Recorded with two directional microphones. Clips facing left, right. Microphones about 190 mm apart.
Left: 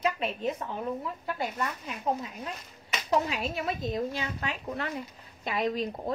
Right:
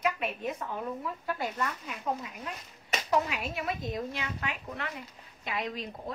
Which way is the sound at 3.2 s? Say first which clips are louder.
Left 3 dB; 30° left (ahead or behind).